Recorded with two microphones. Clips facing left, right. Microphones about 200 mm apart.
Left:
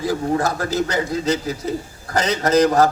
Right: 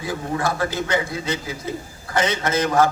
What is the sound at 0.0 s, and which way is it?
A man's voice, 40° left (ahead or behind).